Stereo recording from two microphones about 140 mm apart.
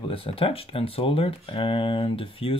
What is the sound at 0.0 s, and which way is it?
Speech, 40° left (ahead or behind).